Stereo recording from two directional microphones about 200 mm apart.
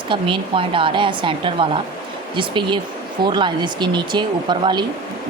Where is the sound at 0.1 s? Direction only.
25° right (ahead or behind).